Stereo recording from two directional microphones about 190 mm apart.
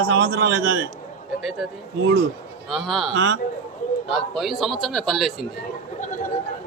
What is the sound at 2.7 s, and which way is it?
Speech, centre (ahead or behind).